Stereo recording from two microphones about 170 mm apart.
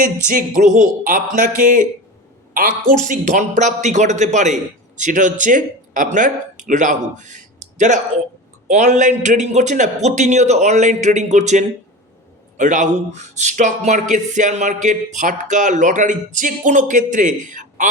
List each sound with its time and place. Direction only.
0.3 s speech: 50° right (ahead or behind)